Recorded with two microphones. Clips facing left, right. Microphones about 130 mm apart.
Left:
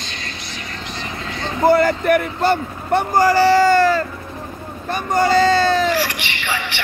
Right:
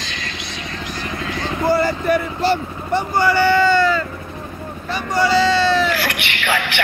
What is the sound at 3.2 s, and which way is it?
Speech, 40° left (ahead or behind).